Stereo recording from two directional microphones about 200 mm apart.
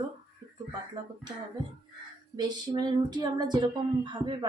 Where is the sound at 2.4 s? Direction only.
20° right (ahead or behind).